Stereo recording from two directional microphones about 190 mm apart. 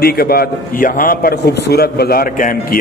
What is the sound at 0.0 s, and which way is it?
A man's voice, 55° left (ahead or behind).